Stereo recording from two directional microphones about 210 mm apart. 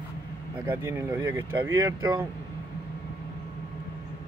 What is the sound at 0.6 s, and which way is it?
Speech, 10° right (ahead or behind).